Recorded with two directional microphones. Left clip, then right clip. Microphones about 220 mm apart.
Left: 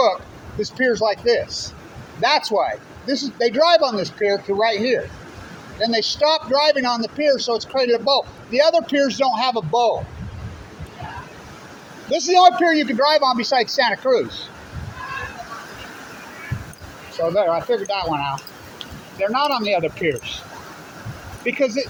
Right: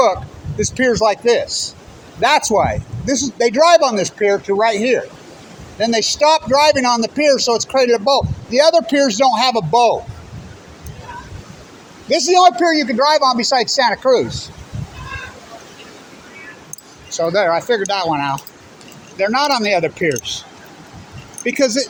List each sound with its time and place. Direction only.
0.6 s speech: 40° right (ahead or behind)
12.0 s a man's voice: 40° right (ahead or behind)
17.2 s speech: 45° right (ahead or behind)
21.4 s speech: 40° right (ahead or behind)